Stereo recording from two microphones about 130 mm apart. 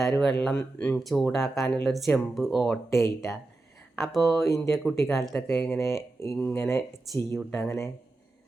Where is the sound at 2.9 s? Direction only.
20° left (ahead or behind).